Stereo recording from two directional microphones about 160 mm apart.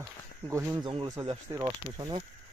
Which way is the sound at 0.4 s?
20° right (ahead or behind).